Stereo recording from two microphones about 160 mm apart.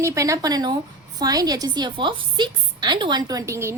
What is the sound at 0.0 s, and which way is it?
A woman's voice, 20° right (ahead or behind).